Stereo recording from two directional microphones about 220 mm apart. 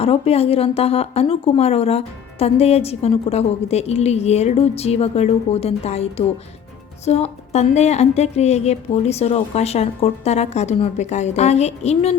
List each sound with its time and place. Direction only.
0.0 s a woman's voice: 25° left (ahead or behind)